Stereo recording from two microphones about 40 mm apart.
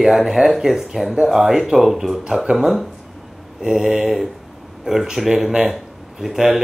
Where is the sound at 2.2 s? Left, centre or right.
Centre.